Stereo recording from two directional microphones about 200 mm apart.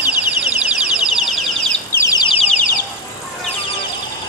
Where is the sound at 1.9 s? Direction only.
20° left (ahead or behind).